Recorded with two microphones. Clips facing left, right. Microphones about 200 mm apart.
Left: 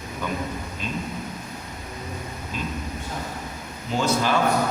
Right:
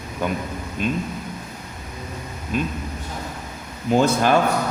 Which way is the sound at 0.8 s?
55° right (ahead or behind).